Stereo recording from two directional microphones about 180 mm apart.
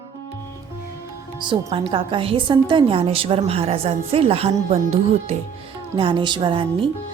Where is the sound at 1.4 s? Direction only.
30° right (ahead or behind).